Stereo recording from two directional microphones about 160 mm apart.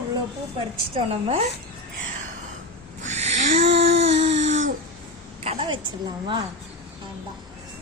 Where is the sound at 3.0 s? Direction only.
45° right (ahead or behind).